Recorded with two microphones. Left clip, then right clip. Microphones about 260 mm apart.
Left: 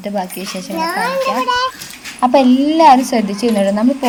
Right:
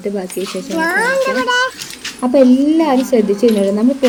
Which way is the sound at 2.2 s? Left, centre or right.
Left.